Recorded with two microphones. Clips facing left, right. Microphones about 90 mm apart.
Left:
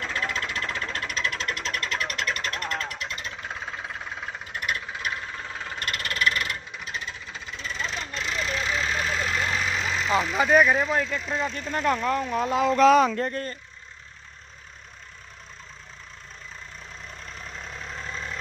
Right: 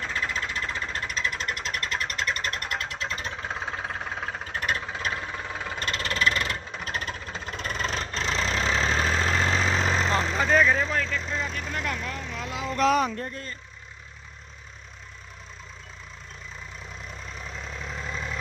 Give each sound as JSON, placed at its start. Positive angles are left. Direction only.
{"t": 0.0, "sound": "a sound", "side_deg": -10}
{"t": 1.0, "sound": "vehicle", "side_deg": -5}
{"t": 3.0, "sound": "engine", "side_deg": -35}
{"t": 6.8, "sound": "engine", "side_deg": -50}
{"t": 7.4, "sound": "vehicle", "side_deg": -50}
{"t": 10.3, "sound": "speech", "side_deg": 10}
{"t": 11.3, "sound": "speech", "side_deg": 35}
{"t": 12.6, "sound": "speech", "side_deg": 85}
{"t": 17.4, "sound": "engine knocking", "side_deg": 0}